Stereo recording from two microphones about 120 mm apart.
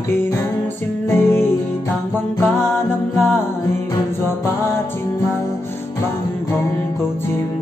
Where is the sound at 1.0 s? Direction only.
20° left (ahead or behind).